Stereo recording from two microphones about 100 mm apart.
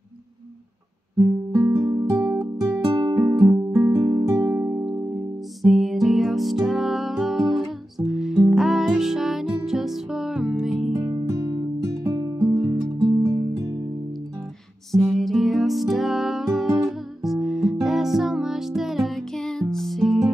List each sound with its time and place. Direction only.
1.5 s music: 30° right (ahead or behind)
5.6 s music: centre (ahead or behind)
11.8 s music: 35° right (ahead or behind)
12.4 s music: 25° right (ahead or behind)
14.9 s music: centre (ahead or behind)